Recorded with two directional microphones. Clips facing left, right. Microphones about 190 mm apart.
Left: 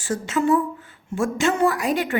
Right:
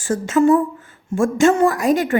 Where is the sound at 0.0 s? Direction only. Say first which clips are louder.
Right 7 dB; 45° right (ahead or behind).